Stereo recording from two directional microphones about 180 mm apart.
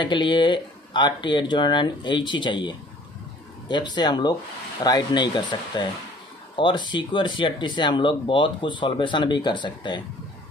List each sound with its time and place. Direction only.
0.0 s speech: 25° left (ahead or behind)